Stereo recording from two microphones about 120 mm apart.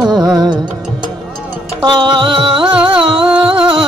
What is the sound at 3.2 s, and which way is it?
Music, 5° right (ahead or behind).